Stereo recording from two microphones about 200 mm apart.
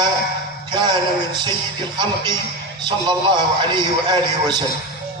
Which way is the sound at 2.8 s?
25° right (ahead or behind).